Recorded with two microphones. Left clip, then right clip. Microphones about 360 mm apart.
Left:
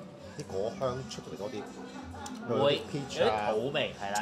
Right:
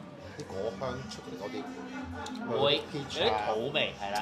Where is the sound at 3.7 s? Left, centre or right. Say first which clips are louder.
Right 1 dB; left.